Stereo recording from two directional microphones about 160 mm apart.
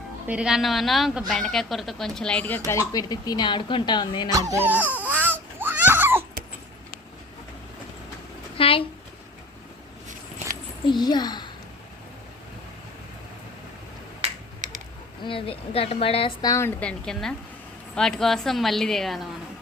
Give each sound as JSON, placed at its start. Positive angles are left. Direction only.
{"t": 0.3, "sound": "a woman's voice", "side_deg": -5}
{"t": 2.6, "sound": "a woman's voice", "side_deg": 20}
{"t": 4.3, "sound": "speech", "side_deg": -20}
{"t": 4.9, "sound": "baby cry", "side_deg": -10}
{"t": 8.5, "sound": "a sound", "side_deg": 35}
{"t": 10.8, "sound": "a child's voice", "side_deg": 25}
{"t": 14.2, "sound": "finger snapping", "side_deg": -50}
{"t": 15.2, "sound": "speech", "side_deg": 35}
{"t": 16.4, "sound": "a woman's voice", "side_deg": 20}
{"t": 17.1, "sound": "a woman's voice", "side_deg": 0}